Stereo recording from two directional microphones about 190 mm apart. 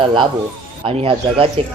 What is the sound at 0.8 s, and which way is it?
Speech, 30° right (ahead or behind).